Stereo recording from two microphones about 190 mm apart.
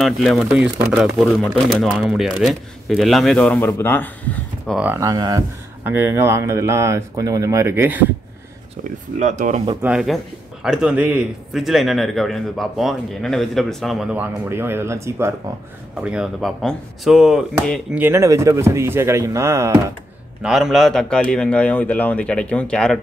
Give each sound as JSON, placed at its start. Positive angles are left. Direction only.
{"t": 0.0, "sound": "a man's voice", "side_deg": 0}
{"t": 4.7, "sound": "speech", "side_deg": -10}
{"t": 9.2, "sound": "speech", "side_deg": -40}
{"t": 9.8, "sound": "a man's voice", "side_deg": -5}
{"t": 20.4, "sound": "a man's voice", "side_deg": 0}